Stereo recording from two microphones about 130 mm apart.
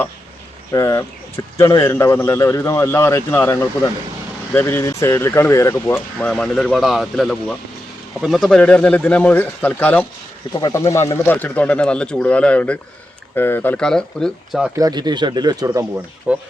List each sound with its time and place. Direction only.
0.7 s a man's voice: 25° left (ahead or behind)
10.6 s a man's voice: 25° left (ahead or behind); by 14.6 s 5° left (ahead or behind)
14.8 s speech: 30° right (ahead or behind)
16.3 s speech: 10° right (ahead or behind)